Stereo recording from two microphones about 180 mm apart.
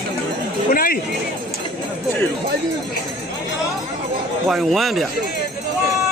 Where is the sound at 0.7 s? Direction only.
55° left (ahead or behind).